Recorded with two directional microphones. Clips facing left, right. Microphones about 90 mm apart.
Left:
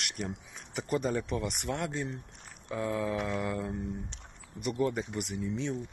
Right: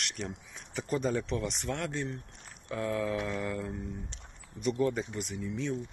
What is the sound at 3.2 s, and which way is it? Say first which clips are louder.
Speech: left 1 dB; 25° left (ahead or behind).